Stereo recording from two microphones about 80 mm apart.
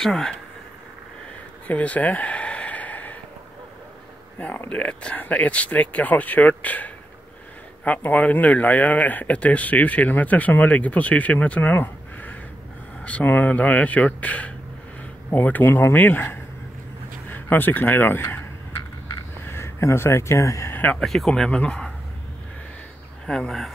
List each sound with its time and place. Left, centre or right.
0.0 s speech: centre
1.7 s a sound: centre
4.4 s speech: centre
18.8 s a sound: left
19.4 s speech: left
20.7 s a sound: left
21.0 s speech: centre
21.3 s speech: centre
23.2 s speech: centre